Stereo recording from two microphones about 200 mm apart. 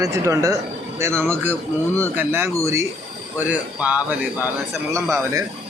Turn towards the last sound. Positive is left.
turn(degrees=-15)  # may be behind; listen again after turning